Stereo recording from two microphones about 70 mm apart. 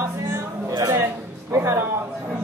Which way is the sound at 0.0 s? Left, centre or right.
Right.